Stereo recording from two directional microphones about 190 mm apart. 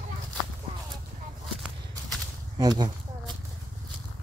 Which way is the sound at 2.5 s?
20° right (ahead or behind).